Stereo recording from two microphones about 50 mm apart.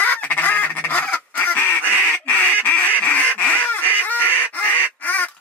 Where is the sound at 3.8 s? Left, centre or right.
Right.